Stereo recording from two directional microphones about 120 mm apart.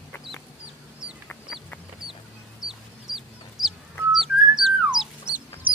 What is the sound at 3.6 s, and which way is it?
Bird, centre (ahead or behind).